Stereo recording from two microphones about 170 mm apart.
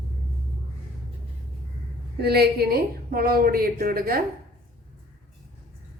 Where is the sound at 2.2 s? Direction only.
70° right (ahead or behind).